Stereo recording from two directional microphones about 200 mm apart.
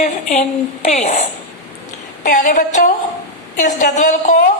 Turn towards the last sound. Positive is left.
turn(degrees=35)  # may be behind; listen again after turning